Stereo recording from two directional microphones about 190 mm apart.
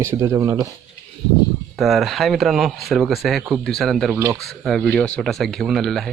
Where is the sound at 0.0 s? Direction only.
15° right (ahead or behind).